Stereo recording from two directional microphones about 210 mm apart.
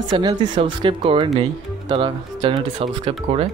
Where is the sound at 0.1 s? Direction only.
20° right (ahead or behind).